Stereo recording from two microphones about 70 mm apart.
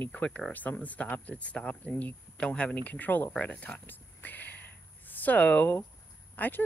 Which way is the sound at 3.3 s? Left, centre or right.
Left.